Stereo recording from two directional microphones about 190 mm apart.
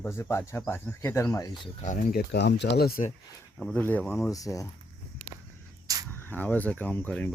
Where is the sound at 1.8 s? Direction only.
45° left (ahead or behind).